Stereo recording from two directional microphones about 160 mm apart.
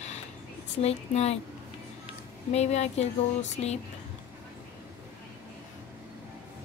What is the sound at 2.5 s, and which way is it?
A woman's voice, 45° left (ahead or behind).